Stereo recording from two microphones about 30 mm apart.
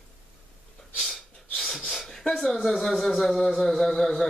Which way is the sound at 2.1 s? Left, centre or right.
Centre.